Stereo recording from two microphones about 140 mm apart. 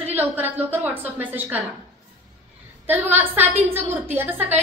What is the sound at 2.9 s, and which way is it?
A woman's voice, 15° right (ahead or behind).